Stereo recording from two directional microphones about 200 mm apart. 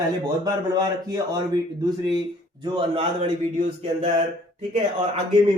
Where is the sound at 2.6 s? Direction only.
25° right (ahead or behind).